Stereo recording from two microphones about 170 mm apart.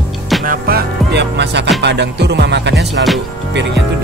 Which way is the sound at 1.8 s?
90° right.